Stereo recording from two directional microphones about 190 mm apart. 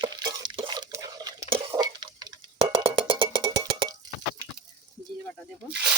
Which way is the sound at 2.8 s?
25° right (ahead or behind).